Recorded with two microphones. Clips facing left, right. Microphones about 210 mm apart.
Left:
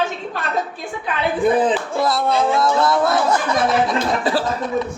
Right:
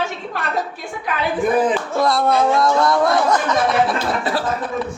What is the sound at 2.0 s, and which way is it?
Speech, centre (ahead or behind).